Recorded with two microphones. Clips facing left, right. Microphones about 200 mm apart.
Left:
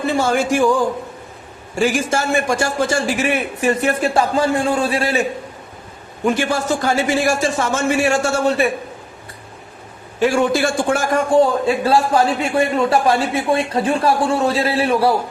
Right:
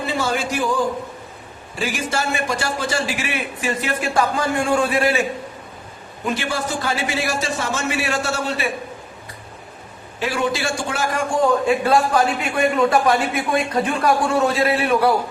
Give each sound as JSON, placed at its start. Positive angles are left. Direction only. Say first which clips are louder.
{"t": 0.0, "sound": "a sound", "louder": "left 5 dB", "side_deg": 50}
{"t": 1.7, "sound": "a man's voice", "louder": "left 6 dB", "side_deg": 45}
{"t": 4.2, "sound": "a man's voice", "louder": "left 1 dB", "side_deg": 30}
{"t": 6.2, "sound": "a man's voice", "louder": "left 6 dB", "side_deg": 45}
{"t": 10.2, "sound": "a man's voice", "louder": "left 7 dB", "side_deg": 45}
{"t": 11.6, "sound": "a man's voice", "louder": "left 1 dB", "side_deg": 30}